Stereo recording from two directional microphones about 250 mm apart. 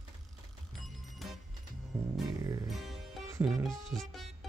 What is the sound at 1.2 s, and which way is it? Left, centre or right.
Music, centre.